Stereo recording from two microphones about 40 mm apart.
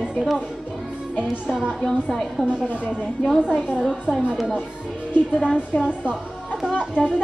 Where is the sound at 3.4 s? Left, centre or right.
Left.